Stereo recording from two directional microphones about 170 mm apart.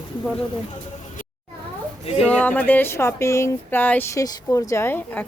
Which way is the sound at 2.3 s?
10° left (ahead or behind).